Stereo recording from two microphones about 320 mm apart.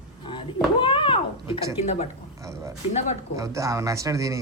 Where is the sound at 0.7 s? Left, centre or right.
Centre.